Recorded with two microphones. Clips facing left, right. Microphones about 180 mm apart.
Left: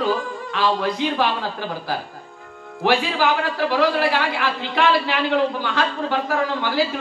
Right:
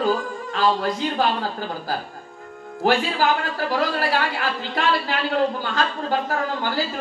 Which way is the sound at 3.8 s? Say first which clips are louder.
Left 3 dB; 45° right (ahead or behind).